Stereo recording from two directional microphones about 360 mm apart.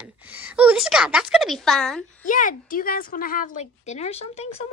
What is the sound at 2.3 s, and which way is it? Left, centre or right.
A woman's voice, left.